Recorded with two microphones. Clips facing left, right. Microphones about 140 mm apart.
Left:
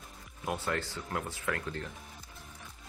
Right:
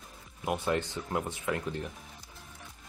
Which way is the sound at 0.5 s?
20° right (ahead or behind).